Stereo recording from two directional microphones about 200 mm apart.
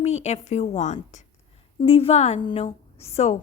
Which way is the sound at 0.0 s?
35° left (ahead or behind).